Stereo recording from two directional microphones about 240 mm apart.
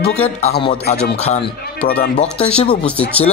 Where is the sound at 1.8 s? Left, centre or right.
Left.